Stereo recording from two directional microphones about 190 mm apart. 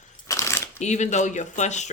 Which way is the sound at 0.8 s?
40° left (ahead or behind).